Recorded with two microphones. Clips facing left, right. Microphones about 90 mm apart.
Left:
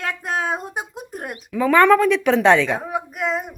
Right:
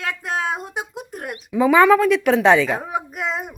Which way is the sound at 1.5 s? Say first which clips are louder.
Right 1 dB; 15° right (ahead or behind).